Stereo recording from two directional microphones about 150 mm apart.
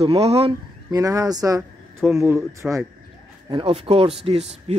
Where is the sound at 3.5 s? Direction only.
35° right (ahead or behind).